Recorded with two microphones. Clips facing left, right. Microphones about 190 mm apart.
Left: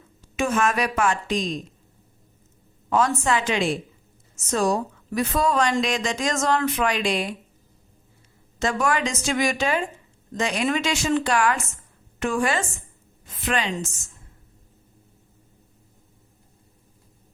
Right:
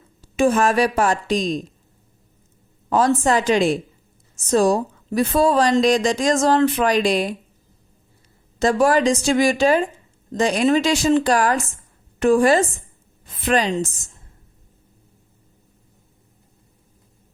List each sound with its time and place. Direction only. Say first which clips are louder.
0.2 s speech: right 6 dB; 35° right (ahead or behind)
2.9 s speech: right 4 dB; 35° right (ahead or behind)
8.5 s speech: right 7 dB; 35° right (ahead or behind)